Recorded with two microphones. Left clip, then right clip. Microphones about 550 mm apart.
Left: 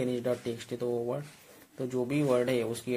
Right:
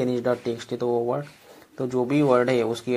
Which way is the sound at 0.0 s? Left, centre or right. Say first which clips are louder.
Right 7 dB; left.